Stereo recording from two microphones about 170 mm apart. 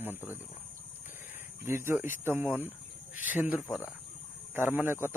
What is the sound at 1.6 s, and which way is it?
Speech, 15° right (ahead or behind).